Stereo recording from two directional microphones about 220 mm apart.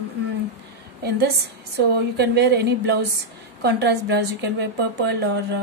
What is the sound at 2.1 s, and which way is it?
A woman's voice, 50° right (ahead or behind).